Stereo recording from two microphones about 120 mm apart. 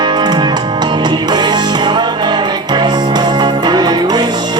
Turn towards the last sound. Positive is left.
turn(degrees=-40)  # may be behind; listen again after turning